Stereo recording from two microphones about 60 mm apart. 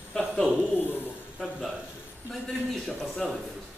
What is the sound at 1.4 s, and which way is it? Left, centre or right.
Speech, centre.